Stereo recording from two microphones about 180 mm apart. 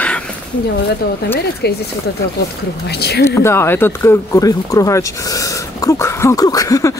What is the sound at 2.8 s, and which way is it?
Speech, 65° left (ahead or behind).